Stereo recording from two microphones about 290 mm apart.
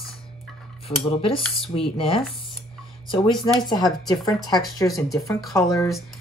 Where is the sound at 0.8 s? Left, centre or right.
Centre.